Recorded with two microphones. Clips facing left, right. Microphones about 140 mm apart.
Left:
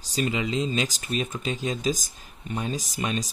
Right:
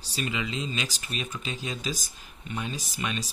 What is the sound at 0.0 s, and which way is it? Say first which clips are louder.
Speech: left 5 dB; 40° left (ahead or behind).